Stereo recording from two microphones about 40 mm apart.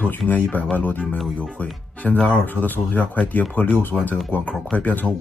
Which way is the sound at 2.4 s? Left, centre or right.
Left.